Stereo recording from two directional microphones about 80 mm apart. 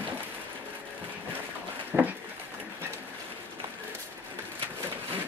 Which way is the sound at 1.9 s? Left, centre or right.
Right.